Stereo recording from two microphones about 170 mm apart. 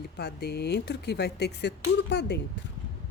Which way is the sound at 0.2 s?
70° left (ahead or behind).